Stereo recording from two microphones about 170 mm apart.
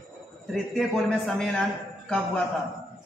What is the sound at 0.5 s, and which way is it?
A man's voice, centre (ahead or behind).